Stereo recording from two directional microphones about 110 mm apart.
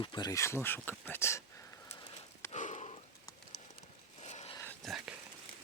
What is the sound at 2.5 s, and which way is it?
Sniff, 85° left.